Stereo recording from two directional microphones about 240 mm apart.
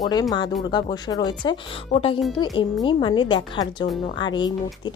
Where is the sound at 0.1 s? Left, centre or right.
Centre.